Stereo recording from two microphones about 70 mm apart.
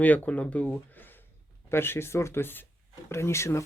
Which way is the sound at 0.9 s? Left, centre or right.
Left.